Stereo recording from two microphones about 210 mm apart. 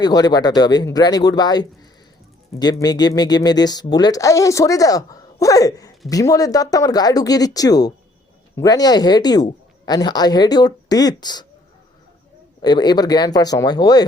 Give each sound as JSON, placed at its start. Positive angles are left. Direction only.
{"t": 0.0, "sound": "speech", "side_deg": 20}
{"t": 12.6, "sound": "speech", "side_deg": 20}